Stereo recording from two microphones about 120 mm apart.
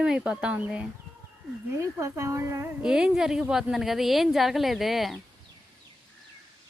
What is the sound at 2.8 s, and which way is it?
A woman's voice, 5° right (ahead or behind).